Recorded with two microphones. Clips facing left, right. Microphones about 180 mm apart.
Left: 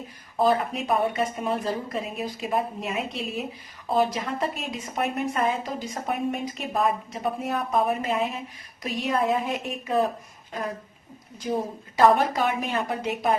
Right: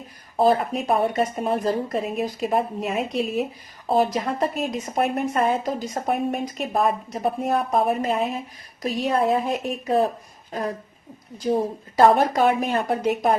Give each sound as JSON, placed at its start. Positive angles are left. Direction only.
{"t": 0.4, "sound": "a woman's voice", "side_deg": -40}
{"t": 11.9, "sound": "a woman's voice", "side_deg": -40}